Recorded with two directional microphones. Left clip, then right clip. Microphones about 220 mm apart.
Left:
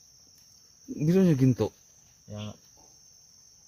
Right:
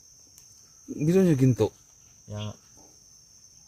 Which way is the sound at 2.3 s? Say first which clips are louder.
Right 3 dB; 40° right (ahead or behind).